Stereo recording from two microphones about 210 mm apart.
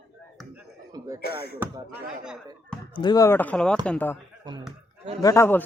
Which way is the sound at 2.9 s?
20° left (ahead or behind).